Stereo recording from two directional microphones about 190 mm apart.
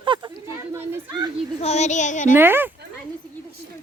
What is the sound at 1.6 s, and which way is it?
Speech, 35° left (ahead or behind).